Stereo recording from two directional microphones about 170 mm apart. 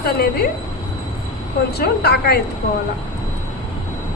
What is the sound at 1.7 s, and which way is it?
Speech, 70° left (ahead or behind).